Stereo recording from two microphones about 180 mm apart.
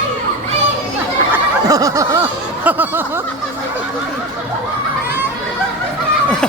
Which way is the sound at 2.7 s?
10° right (ahead or behind).